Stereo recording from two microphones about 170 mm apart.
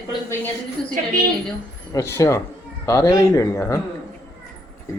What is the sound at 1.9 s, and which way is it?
Speech, 15° left (ahead or behind).